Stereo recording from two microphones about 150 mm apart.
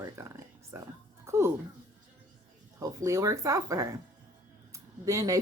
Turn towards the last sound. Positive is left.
turn(degrees=-20)  # may be behind; listen again after turning